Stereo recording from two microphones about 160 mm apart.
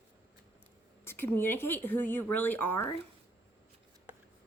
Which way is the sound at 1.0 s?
15° left (ahead or behind).